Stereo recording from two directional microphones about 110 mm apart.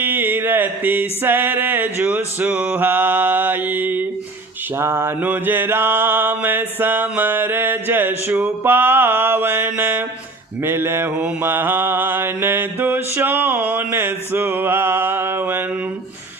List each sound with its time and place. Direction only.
0.0 s music: 20° right (ahead or behind)
4.8 s mantra: 20° right (ahead or behind)